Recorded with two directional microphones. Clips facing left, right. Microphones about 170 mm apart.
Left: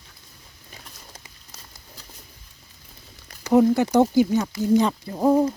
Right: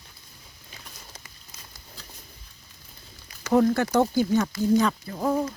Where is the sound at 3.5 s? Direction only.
15° left (ahead or behind).